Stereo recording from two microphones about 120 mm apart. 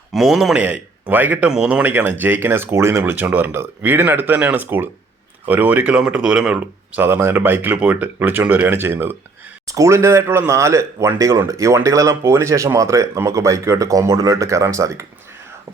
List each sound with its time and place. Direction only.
0.1 s a man's voice: centre (ahead or behind)
0.6 s speech: 10° right (ahead or behind)